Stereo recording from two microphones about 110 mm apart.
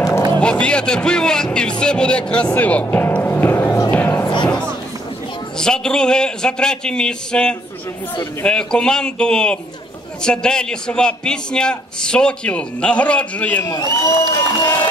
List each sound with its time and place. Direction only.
0.4 s a man's voice: 10° left (ahead or behind); by 3.9 s 25° left (ahead or behind)
3.9 s music: 15° left (ahead or behind)
5.6 s a man's voice: 5° left (ahead or behind)
13.7 s speech: 35° left (ahead or behind)